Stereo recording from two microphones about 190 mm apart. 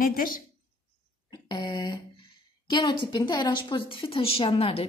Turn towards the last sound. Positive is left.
turn(degrees=30)  # may be behind; listen again after turning